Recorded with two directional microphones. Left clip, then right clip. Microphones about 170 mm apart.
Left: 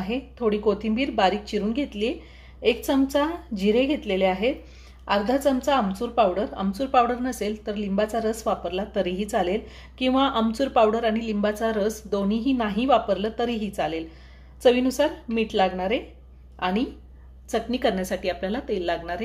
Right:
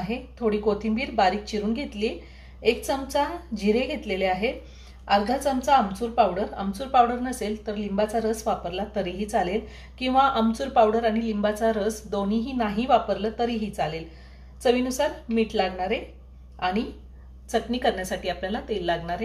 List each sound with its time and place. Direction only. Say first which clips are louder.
0.0 s a woman's voice: left 2 dB; 45° left (ahead or behind)